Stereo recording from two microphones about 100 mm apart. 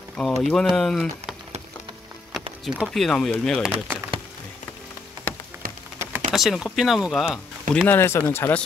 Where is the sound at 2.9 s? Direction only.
5° left (ahead or behind).